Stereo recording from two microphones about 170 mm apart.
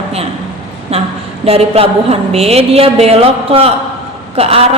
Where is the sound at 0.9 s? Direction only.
35° right (ahead or behind).